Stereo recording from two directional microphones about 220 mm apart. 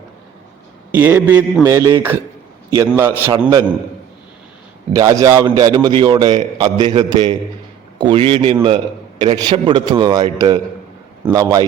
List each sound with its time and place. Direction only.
0.9 s a man's voice: 10° right (ahead or behind)
4.9 s a man's voice: 15° right (ahead or behind)